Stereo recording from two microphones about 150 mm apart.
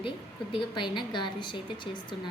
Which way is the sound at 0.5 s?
35° left (ahead or behind).